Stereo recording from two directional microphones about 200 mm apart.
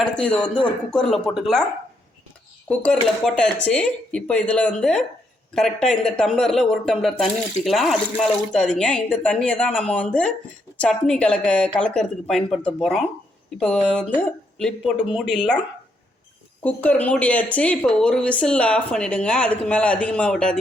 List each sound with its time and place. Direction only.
0.0 s speech: 5° left (ahead or behind)
2.6 s speech: 5° left (ahead or behind)
16.6 s speech: 5° left (ahead or behind)